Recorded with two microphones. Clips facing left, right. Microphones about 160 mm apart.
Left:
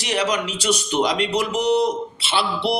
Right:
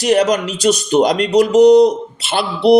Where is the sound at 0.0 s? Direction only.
45° right (ahead or behind).